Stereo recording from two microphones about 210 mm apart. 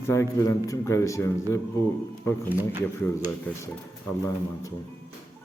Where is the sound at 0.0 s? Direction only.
10° left (ahead or behind).